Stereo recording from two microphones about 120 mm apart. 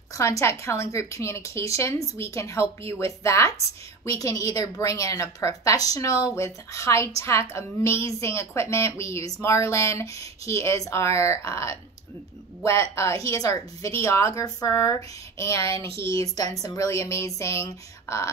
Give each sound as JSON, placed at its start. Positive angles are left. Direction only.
{"t": 0.1, "sound": "a woman's voice", "side_deg": 25}